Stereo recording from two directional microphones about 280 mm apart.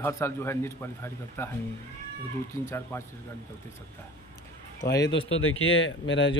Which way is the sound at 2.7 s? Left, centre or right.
Centre.